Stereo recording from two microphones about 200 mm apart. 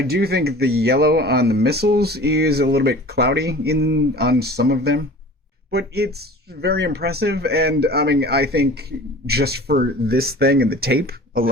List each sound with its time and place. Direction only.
0.0 s speech: 50° right (ahead or behind)